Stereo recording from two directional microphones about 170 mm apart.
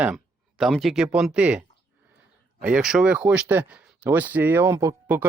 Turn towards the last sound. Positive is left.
turn(degrees=-15)  # may be behind; listen again after turning